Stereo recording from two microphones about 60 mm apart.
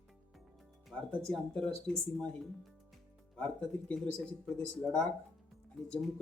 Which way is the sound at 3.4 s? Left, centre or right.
Centre.